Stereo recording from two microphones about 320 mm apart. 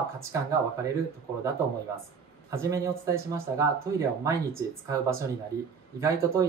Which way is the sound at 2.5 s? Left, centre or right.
Centre.